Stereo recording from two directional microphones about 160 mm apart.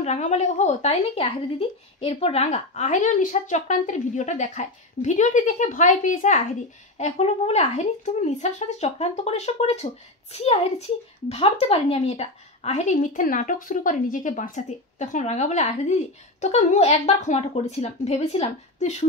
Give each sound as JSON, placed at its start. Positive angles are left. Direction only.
{"t": 0.0, "sound": "speech", "side_deg": 45}